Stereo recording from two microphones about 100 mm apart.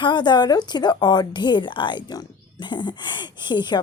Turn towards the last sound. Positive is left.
turn(degrees=50)  # may be behind; listen again after turning